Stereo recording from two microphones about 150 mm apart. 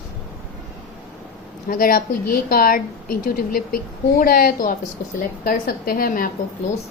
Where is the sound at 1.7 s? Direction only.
75° left (ahead or behind).